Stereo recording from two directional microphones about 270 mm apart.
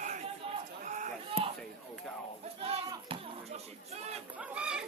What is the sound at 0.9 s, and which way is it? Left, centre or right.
Run, right.